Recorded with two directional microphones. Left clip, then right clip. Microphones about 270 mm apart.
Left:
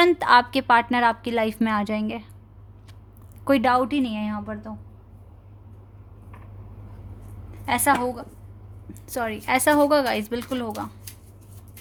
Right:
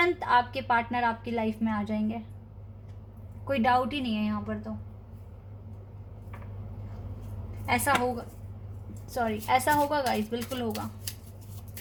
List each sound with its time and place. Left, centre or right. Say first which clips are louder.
0.2 s a woman's voice: left 8 dB; left
3.4 s a woman's voice: left 5 dB; left
7.6 s a woman's voice: left 6 dB; left
9.0 s a woman's voice: left 3 dB; left